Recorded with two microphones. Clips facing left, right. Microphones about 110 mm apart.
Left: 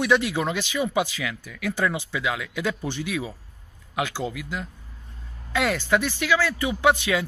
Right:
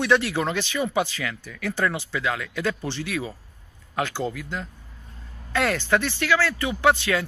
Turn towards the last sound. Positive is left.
turn(degrees=15)  # may be behind; listen again after turning